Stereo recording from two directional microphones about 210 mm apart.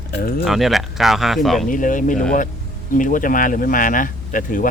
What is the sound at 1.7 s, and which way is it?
Speech, 40° left (ahead or behind).